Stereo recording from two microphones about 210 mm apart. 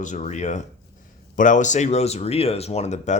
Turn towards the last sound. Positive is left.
turn(degrees=35)  # may be behind; listen again after turning